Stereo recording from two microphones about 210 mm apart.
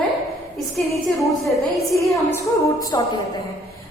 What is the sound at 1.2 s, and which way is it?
Speech, centre (ahead or behind).